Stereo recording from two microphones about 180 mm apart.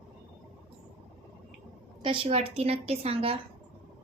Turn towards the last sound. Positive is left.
turn(degrees=-30)  # may be behind; listen again after turning